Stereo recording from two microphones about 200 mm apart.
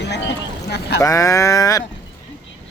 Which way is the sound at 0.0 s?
60° left (ahead or behind).